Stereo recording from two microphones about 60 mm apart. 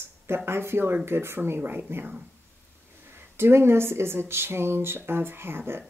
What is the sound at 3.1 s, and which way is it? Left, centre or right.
Speech, right.